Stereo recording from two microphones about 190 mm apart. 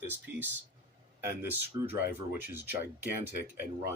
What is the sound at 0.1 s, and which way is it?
Speech, 10° right (ahead or behind).